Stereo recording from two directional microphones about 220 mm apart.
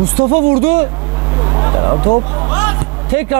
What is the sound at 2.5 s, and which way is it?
Music, 15° right (ahead or behind).